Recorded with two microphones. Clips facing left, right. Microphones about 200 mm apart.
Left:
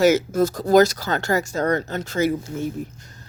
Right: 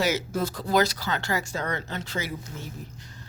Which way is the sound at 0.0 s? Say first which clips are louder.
Left 9 dB; 45° left (ahead or behind).